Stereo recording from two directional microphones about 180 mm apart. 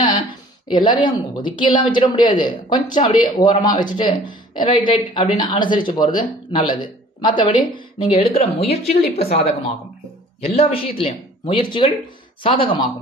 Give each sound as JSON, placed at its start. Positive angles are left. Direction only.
{"t": 0.7, "sound": "speech", "side_deg": 25}